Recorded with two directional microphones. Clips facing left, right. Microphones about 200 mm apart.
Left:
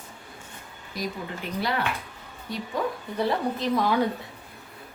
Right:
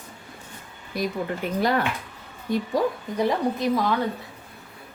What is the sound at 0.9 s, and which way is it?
A woman's voice, 55° right (ahead or behind).